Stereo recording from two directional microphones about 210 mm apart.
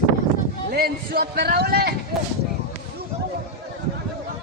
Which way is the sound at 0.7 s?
50° right (ahead or behind).